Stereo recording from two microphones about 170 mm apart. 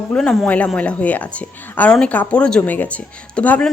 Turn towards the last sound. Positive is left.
turn(degrees=10)  # may be behind; listen again after turning